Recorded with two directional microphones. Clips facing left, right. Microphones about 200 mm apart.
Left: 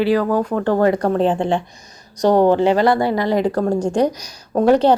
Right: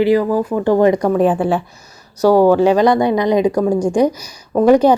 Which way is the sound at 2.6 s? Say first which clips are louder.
Right 3 dB; 15° right (ahead or behind).